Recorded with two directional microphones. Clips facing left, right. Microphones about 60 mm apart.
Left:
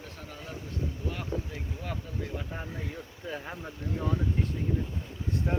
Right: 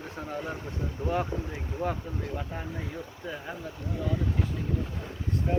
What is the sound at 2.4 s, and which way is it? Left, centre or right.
Speech, centre.